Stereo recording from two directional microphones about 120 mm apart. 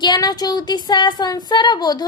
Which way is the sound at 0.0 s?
35° left (ahead or behind).